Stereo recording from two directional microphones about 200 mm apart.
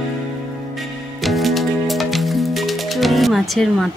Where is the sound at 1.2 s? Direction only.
Centre (ahead or behind).